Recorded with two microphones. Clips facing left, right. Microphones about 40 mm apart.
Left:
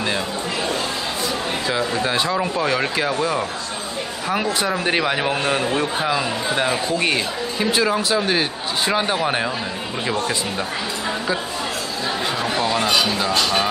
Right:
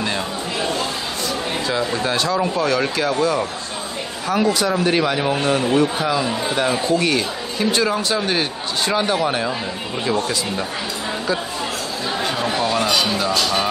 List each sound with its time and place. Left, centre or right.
1.7 s speech: centre
12.4 s speech: centre